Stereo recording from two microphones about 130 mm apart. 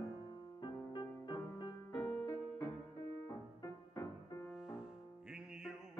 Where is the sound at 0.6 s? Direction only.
35° left (ahead or behind).